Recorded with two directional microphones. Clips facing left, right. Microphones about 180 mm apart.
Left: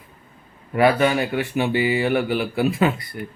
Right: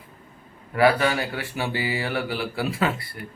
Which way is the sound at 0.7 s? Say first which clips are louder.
Left 3 dB; 20° left (ahead or behind).